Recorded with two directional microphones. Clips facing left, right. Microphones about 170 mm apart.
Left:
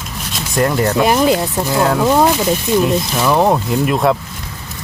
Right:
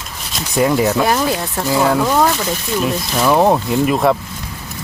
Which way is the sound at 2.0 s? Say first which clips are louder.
Left 3 dB; 15° left (ahead or behind).